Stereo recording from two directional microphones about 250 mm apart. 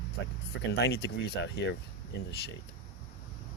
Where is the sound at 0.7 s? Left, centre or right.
Left.